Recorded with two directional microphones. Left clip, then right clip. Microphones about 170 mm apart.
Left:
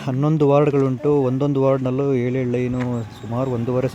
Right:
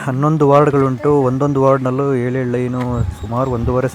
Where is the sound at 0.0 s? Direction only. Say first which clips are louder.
Right 4 dB; 5° right (ahead or behind).